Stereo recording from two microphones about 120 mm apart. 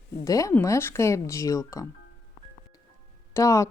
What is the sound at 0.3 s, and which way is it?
Speech, 30° left (ahead or behind).